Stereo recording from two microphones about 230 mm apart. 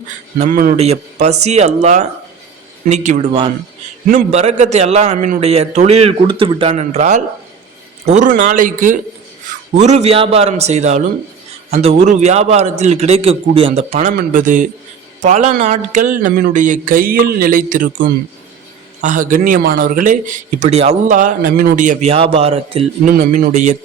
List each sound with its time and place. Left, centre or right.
0.3 s a man's voice: right
23.1 s speech: right